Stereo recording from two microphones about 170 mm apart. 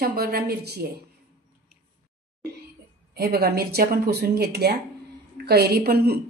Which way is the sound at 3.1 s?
65° right (ahead or behind).